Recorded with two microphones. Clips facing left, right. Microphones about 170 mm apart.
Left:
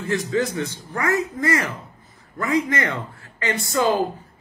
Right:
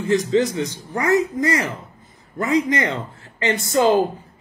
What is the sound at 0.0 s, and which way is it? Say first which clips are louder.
A man's voice: right 5 dB; 15° right (ahead or behind).